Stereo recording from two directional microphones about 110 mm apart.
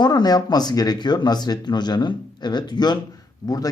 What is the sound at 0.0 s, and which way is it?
A man's voice, 40° left (ahead or behind).